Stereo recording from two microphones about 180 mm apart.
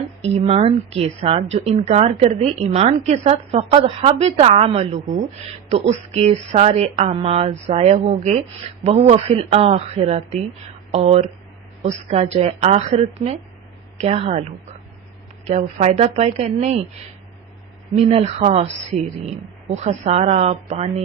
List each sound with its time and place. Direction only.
0.2 s a woman's voice: 35° right (ahead or behind)
15.4 s a woman's voice: 40° right (ahead or behind)
17.9 s a woman's voice: 35° right (ahead or behind)